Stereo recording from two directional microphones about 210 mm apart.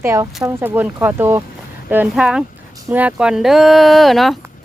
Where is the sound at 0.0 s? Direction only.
15° right (ahead or behind).